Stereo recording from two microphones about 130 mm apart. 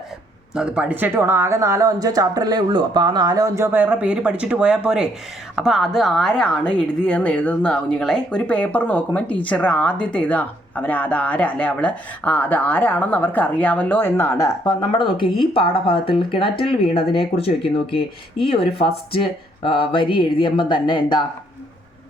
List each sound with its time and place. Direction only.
0.5 s a woman's voice: 10° right (ahead or behind); by 21.2 s 35° left (ahead or behind)